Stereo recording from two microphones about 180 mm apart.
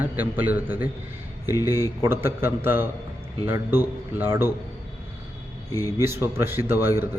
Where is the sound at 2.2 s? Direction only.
10° right (ahead or behind).